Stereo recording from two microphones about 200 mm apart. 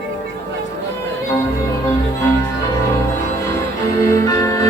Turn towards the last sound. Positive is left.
turn(degrees=15)  # may be behind; listen again after turning